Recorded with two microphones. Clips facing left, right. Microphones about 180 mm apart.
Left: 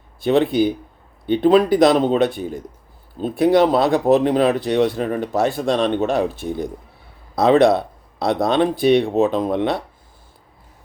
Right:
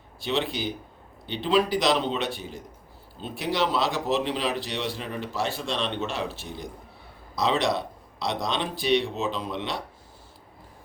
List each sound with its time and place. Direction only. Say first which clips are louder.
0.3 s speech: left 12 dB; 55° left (ahead or behind)